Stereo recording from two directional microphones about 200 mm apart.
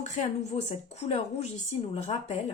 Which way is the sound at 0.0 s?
35° left (ahead or behind).